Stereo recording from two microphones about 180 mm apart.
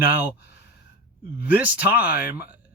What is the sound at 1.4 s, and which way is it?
Speech, 10° right (ahead or behind).